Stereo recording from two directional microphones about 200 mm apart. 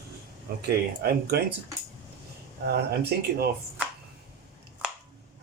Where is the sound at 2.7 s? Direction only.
55° right (ahead or behind).